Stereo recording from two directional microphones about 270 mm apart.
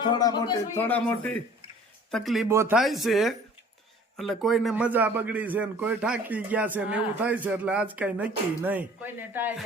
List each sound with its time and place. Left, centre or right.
0.0 s a man's voice: centre